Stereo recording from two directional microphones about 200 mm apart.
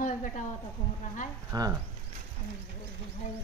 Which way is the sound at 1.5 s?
20° right (ahead or behind).